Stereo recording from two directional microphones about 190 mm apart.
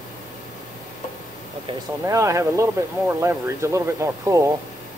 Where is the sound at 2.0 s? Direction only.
15° right (ahead or behind).